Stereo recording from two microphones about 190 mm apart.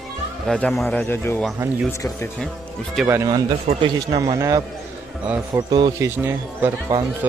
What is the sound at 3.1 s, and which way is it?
Speech, 15° right (ahead or behind).